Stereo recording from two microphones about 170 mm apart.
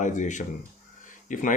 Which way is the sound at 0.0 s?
45° left (ahead or behind).